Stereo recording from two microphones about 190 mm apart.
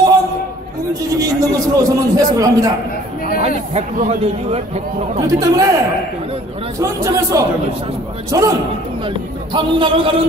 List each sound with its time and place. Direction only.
1.2 s a man's voice: 20° right (ahead or behind)
3.3 s speech: 35° right (ahead or behind)
5.2 s speech: 20° right (ahead or behind)
6.8 s a man's voice: 15° right (ahead or behind)